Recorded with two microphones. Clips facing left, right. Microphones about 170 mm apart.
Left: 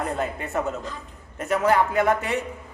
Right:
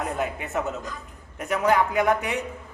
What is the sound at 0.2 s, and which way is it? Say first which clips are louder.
Speech: left 1 dB; centre (ahead or behind).